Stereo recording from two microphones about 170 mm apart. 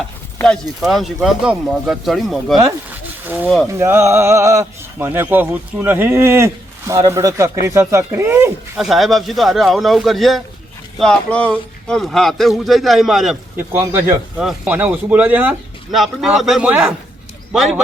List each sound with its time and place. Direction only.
0.4 s speech: centre (ahead or behind)
3.7 s speech: 15° right (ahead or behind)
8.8 s speech: centre (ahead or behind)
13.6 s speech: 10° right (ahead or behind)
15.9 s speech: centre (ahead or behind)